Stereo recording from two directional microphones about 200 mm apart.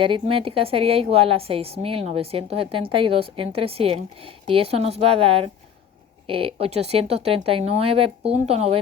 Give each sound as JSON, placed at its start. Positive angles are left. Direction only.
{"t": 0.0, "sound": "a woman's voice", "side_deg": -25}